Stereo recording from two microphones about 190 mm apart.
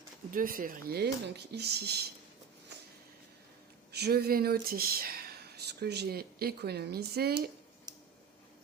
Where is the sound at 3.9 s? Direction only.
55° right (ahead or behind).